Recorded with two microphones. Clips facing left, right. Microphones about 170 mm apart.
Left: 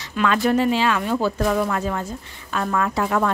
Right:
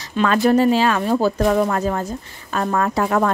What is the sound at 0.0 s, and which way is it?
Speech, 35° right (ahead or behind).